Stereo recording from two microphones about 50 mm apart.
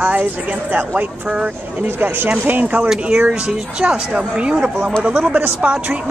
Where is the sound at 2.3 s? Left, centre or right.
Right.